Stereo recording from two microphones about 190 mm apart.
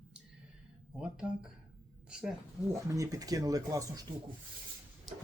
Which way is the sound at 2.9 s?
20° right (ahead or behind).